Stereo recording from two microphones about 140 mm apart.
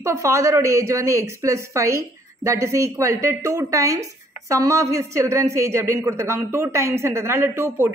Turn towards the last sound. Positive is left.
turn(degrees=-15)  # may be behind; listen again after turning